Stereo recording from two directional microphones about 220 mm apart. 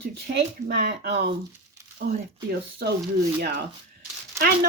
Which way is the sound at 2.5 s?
45° right (ahead or behind).